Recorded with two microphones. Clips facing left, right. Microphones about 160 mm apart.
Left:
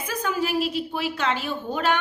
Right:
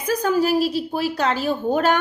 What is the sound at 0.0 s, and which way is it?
A woman's voice, 40° right (ahead or behind).